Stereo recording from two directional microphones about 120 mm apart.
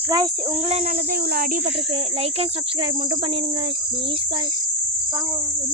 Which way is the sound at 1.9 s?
55° right (ahead or behind).